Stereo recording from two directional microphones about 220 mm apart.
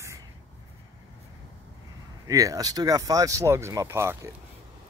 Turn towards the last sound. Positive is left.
turn(degrees=-10)  # may be behind; listen again after turning